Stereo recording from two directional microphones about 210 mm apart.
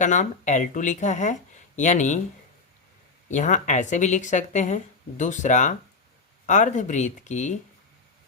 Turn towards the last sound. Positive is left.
turn(degrees=35)  # may be behind; listen again after turning